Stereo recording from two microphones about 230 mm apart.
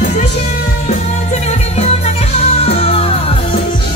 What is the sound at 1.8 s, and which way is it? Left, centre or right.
Music, left.